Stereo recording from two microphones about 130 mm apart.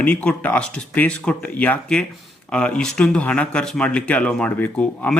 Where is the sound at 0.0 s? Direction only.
10° left (ahead or behind).